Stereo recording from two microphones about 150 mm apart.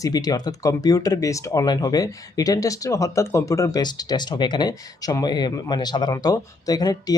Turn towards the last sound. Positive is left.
turn(degrees=25)  # may be behind; listen again after turning